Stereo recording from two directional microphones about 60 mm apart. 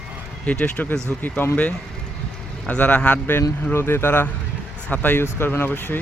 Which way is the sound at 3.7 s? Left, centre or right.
Left.